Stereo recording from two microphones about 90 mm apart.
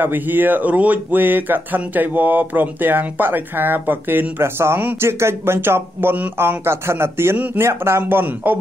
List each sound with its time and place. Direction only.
0.0 s speech: 20° right (ahead or behind)